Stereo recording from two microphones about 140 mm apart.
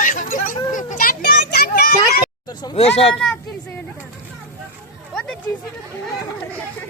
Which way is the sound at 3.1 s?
5° left (ahead or behind).